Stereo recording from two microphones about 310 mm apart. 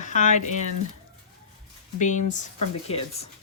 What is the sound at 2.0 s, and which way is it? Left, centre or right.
Speech, left.